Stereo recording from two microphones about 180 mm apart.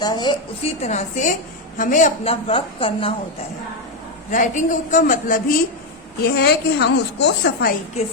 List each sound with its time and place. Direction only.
0.0 s a woman's voice: 25° left (ahead or behind)
0.8 s a woman's voice: 40° left (ahead or behind)
4.3 s a woman's voice: 45° left (ahead or behind)
6.2 s a woman's voice: 65° left (ahead or behind)